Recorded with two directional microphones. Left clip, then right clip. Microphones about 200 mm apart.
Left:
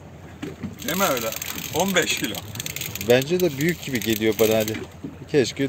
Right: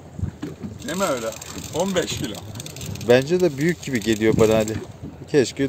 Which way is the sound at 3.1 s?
10° right (ahead or behind).